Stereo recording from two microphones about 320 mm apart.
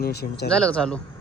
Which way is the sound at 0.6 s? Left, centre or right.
Centre.